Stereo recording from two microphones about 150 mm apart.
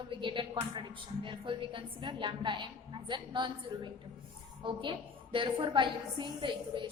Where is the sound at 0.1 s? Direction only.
35° right (ahead or behind).